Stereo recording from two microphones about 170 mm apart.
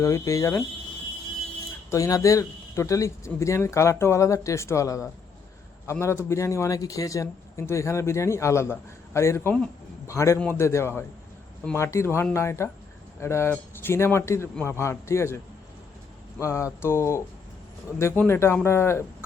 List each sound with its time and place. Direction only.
0.0 s speech: 20° left (ahead or behind)
1.9 s a man's voice: 20° left (ahead or behind)
16.4 s a man's voice: 15° left (ahead or behind)